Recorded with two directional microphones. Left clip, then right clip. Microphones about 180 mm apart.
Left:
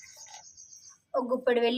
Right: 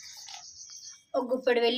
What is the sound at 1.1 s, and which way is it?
Speech, 5° right (ahead or behind).